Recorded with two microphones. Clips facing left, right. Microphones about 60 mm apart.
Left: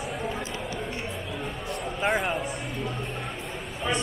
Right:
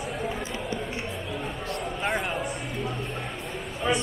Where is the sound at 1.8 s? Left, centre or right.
Centre.